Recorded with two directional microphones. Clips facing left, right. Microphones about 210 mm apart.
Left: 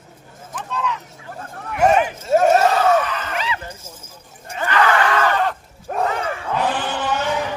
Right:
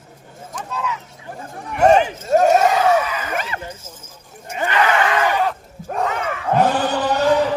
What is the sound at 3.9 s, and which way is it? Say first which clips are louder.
Clip-clop: even; 10° left (ahead or behind).